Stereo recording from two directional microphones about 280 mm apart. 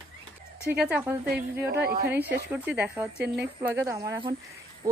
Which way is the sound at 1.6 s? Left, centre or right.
Right.